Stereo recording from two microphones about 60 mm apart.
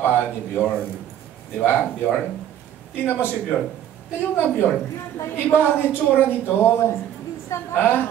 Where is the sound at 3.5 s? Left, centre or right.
Left.